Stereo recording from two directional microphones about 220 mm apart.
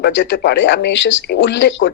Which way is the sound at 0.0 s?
55° left (ahead or behind).